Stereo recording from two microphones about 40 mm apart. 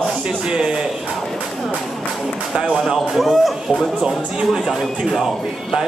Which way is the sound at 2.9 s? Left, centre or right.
Centre.